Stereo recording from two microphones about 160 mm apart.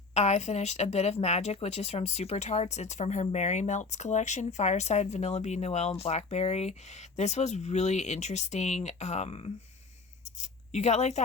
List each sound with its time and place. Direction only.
0.1 s speech: 45° left (ahead or behind)
10.7 s speech: 45° left (ahead or behind)